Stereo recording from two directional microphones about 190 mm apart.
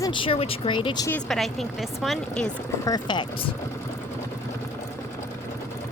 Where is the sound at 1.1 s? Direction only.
5° left (ahead or behind).